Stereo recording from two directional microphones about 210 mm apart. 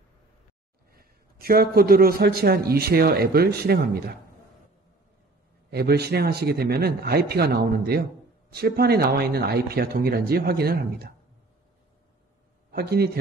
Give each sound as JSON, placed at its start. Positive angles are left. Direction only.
{"t": 0.9, "sound": "speech", "side_deg": -45}
{"t": 5.7, "sound": "speech", "side_deg": -50}
{"t": 12.7, "sound": "speech", "side_deg": -45}